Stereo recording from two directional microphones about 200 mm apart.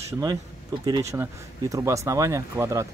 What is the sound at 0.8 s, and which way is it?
Speech, 15° right (ahead or behind).